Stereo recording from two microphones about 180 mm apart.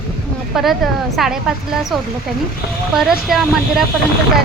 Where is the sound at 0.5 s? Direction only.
Centre (ahead or behind).